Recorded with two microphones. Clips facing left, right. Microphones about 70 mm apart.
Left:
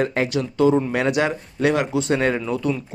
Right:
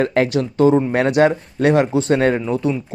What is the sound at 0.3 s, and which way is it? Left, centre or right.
Speech, right.